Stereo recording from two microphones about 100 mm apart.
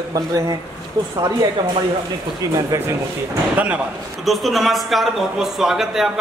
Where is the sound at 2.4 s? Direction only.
35° right (ahead or behind).